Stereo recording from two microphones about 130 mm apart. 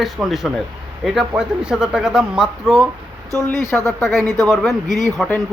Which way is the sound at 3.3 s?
20° left (ahead or behind).